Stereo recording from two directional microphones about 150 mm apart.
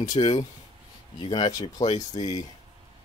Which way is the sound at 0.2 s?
35° left (ahead or behind).